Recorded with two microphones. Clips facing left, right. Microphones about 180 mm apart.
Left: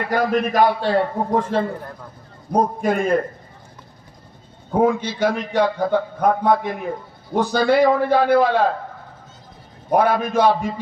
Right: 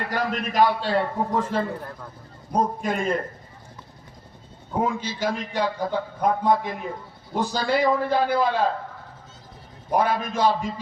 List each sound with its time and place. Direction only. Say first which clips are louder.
0.1 s a man's voice: left 10 dB; 55° left (ahead or behind)
2.5 s a man's voice: left 5 dB; 60° left (ahead or behind)
4.7 s a man's voice: left 7 dB; 60° left (ahead or behind)
9.9 s a man's voice: left 5 dB; 60° left (ahead or behind)